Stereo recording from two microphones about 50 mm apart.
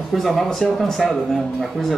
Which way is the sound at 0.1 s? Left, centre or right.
Centre.